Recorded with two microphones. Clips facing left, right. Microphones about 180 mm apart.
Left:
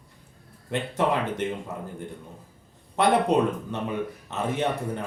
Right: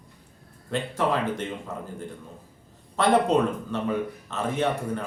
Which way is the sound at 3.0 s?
15° left (ahead or behind).